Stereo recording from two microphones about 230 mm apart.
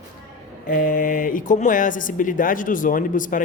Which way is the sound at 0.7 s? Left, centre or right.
Left.